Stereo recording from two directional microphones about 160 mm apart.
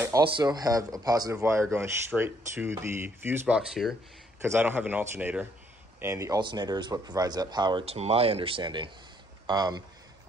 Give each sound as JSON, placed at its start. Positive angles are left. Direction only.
{"t": 0.0, "sound": "speech", "side_deg": -20}
{"t": 4.4, "sound": "speech", "side_deg": -15}
{"t": 7.8, "sound": "speech", "side_deg": -40}